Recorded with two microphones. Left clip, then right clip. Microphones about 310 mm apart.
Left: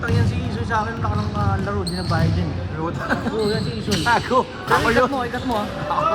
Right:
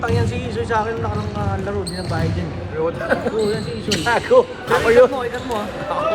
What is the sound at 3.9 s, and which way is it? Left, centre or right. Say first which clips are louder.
Speech: right 4 dB; centre.